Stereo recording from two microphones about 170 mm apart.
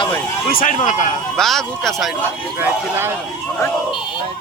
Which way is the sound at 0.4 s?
55° left (ahead or behind).